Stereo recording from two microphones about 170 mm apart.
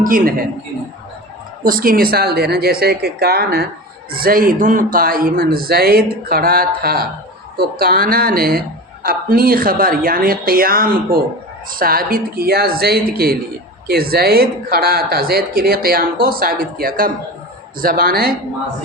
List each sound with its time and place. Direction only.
0.0 s speech: 55° right (ahead or behind)
1.6 s speech: 55° right (ahead or behind)
4.1 s speech: 60° right (ahead or behind)